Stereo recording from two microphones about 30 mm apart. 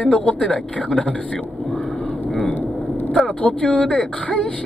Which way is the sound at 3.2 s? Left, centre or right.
Left.